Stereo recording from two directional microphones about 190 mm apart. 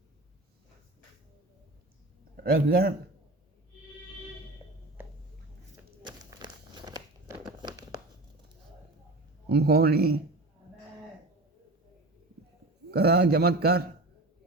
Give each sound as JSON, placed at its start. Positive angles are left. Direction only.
{"t": 2.3, "sound": "a man's voice", "side_deg": -50}
{"t": 6.0, "sound": "crumpling", "side_deg": -25}
{"t": 9.5, "sound": "a man's voice", "side_deg": -60}
{"t": 12.9, "sound": "a man's voice", "side_deg": -55}